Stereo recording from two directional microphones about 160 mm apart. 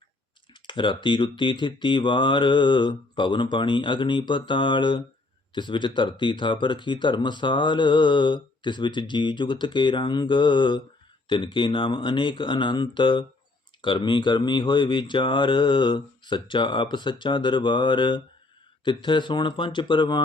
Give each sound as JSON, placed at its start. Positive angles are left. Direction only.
{"t": 0.5, "sound": "speech", "side_deg": 30}